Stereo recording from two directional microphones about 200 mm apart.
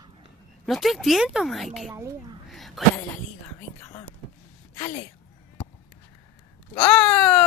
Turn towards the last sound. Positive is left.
turn(degrees=5)  # may be behind; listen again after turning